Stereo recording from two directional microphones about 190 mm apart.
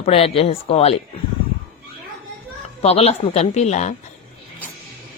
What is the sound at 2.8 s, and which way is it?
Speech, 35° left (ahead or behind).